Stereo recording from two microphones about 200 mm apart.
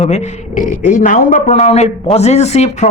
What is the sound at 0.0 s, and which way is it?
A man's voice, 35° left (ahead or behind).